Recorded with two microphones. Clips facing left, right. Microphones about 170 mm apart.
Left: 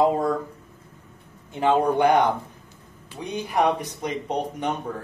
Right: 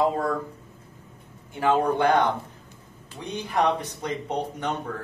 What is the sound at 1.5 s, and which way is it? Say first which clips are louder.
Speech: left 2 dB; 20° left (ahead or behind).